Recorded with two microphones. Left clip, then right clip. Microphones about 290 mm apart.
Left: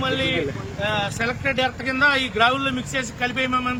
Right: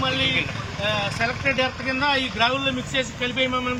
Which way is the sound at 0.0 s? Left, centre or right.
Centre.